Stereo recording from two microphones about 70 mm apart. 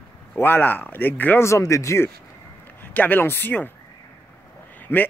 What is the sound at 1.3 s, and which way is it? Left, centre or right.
Speech, left.